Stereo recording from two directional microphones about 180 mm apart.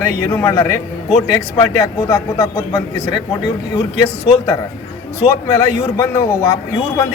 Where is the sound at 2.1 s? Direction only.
20° left (ahead or behind).